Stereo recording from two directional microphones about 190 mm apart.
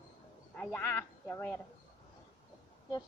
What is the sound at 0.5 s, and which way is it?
A woman's voice, 10° left (ahead or behind).